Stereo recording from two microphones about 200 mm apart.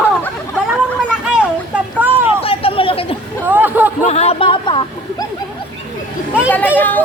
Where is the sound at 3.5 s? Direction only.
10° right (ahead or behind).